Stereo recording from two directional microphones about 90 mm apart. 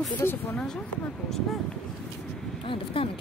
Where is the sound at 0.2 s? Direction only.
30° left (ahead or behind).